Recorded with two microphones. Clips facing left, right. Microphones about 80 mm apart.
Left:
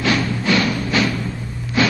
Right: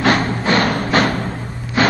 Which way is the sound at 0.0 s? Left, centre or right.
Right.